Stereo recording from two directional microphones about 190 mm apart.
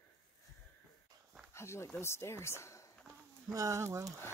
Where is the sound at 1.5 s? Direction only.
15° left (ahead or behind).